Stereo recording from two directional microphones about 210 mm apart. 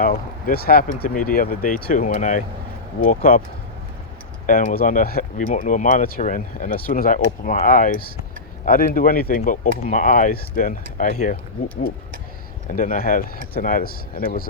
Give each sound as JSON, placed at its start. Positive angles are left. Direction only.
{"t": 0.0, "sound": "speech", "side_deg": 45}
{"t": 4.4, "sound": "speech", "side_deg": 40}
{"t": 12.7, "sound": "speech", "side_deg": 40}